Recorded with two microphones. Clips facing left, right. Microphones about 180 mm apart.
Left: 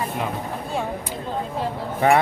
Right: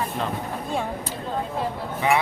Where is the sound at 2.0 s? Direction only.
50° left (ahead or behind).